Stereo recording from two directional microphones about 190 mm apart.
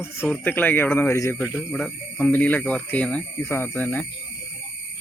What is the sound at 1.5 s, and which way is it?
Speech, 5° left (ahead or behind).